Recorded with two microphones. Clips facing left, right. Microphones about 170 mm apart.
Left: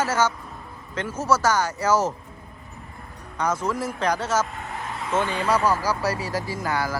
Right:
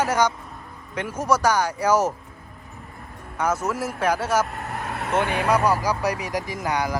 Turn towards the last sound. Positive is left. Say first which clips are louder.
# right 1 dB
turn(degrees=-15)  # may be behind; listen again after turning